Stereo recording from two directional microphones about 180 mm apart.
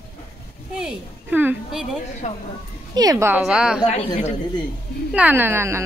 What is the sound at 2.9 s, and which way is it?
Speech, 20° right (ahead or behind).